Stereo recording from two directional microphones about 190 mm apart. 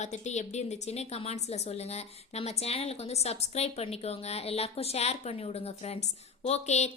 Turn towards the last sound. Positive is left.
turn(degrees=35)  # may be behind; listen again after turning